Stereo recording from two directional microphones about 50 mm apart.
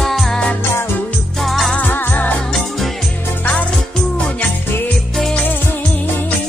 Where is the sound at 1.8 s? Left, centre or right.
Left.